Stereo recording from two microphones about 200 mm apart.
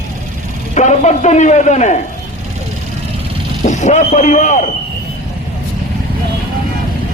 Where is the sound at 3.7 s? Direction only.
35° left (ahead or behind).